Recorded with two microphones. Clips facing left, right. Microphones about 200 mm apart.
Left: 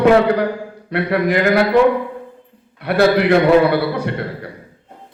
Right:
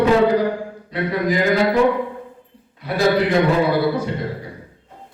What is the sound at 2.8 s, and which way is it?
A man's voice, 65° left (ahead or behind).